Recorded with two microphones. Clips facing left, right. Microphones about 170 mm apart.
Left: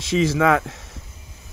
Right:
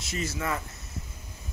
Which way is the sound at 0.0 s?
90° left.